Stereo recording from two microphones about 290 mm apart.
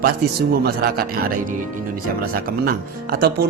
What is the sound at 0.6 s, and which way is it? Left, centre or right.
Speech, right.